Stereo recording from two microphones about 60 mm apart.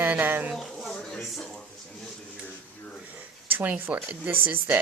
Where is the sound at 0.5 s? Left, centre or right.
Centre.